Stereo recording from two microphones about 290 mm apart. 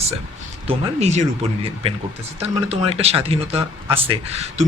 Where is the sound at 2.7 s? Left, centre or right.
Right.